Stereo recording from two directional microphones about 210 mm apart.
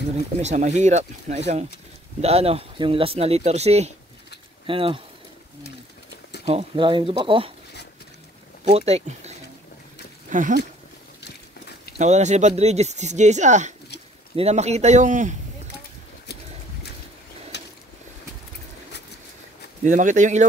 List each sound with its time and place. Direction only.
0.4 s speech: 35° right (ahead or behind)
6.4 s speech: 25° right (ahead or behind)
8.6 s speech: 30° right (ahead or behind)
12.0 s speech: 35° right (ahead or behind)
17.5 s a sound: 55° left (ahead or behind)
19.8 s speech: 35° right (ahead or behind)